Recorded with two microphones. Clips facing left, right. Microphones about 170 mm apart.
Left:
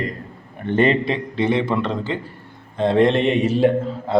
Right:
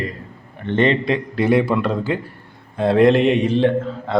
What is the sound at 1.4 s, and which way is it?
A man's voice, 5° right (ahead or behind).